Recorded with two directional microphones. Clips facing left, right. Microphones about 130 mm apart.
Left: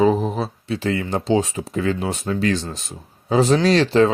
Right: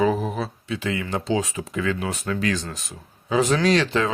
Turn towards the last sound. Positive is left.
turn(degrees=30)  # may be behind; listen again after turning